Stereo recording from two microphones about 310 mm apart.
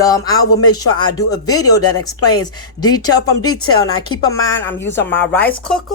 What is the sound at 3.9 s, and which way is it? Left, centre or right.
Speech, left.